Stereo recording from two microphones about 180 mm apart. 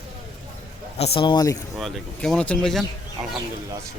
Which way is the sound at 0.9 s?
35° left (ahead or behind).